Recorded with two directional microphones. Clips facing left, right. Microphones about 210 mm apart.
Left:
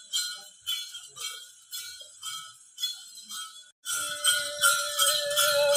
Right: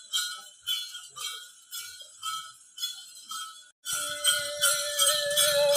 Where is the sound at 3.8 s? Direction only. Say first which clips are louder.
Right 2 dB; 15° right (ahead or behind).